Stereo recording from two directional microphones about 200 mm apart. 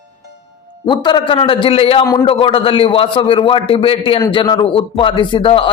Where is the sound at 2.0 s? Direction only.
15° left (ahead or behind).